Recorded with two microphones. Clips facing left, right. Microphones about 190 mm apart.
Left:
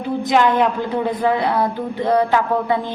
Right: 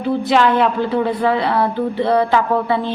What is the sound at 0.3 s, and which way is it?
Speech, 15° left (ahead or behind).